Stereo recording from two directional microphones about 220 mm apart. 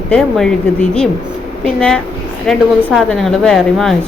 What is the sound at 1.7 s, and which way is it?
A woman's voice, 5° left (ahead or behind).